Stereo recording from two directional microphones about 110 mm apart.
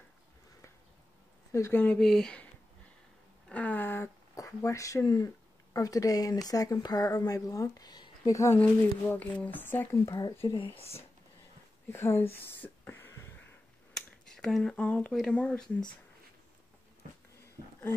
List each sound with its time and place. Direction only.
1.5 s speech: 20° left (ahead or behind)
2.0 s speech: 5° left (ahead or behind)
3.4 s a sound: 15° left (ahead or behind)
4.4 s speech: 25° left (ahead or behind)
9.1 s speech: 15° left (ahead or behind)
10.0 s speech: 35° left (ahead or behind)
10.8 s speech: 65° left (ahead or behind)
11.9 s speech: 20° left (ahead or behind)
13.9 s a sound: 5° left (ahead or behind)
15.1 s speech: 10° left (ahead or behind)